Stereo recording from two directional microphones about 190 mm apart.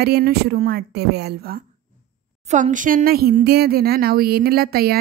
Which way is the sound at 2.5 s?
40° right (ahead or behind).